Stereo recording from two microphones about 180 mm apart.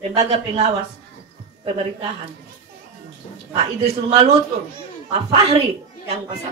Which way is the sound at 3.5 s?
35° right (ahead or behind).